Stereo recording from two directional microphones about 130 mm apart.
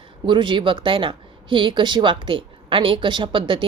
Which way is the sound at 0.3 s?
40° right (ahead or behind).